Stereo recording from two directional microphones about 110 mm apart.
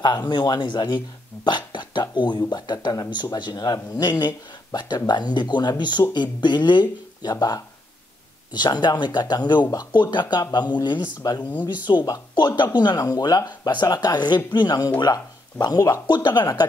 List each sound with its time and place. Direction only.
0.3 s speech: 40° left (ahead or behind)